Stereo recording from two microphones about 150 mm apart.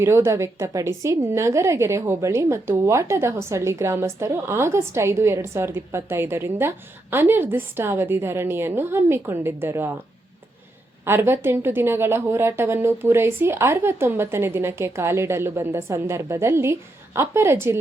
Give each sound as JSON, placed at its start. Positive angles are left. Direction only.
{"t": 0.2, "sound": "a woman's voice", "side_deg": -20}
{"t": 11.0, "sound": "a woman's voice", "side_deg": -15}